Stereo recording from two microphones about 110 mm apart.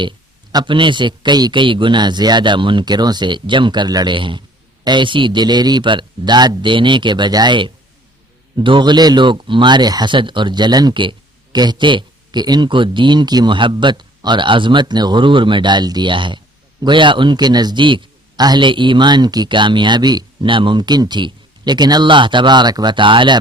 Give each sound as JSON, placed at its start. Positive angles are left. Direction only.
{"t": 0.5, "sound": "a man's voice", "side_deg": -45}